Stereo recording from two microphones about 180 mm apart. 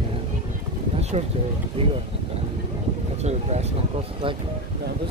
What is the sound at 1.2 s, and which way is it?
Speech, 40° right (ahead or behind).